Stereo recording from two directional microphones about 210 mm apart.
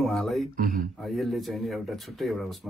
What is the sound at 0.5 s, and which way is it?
Speech, 40° right (ahead or behind).